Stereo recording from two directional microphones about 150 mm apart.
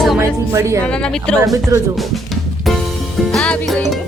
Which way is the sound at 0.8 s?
5° left (ahead or behind).